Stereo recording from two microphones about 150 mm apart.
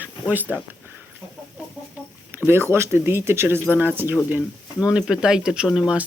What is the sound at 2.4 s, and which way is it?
Speech, 15° right (ahead or behind).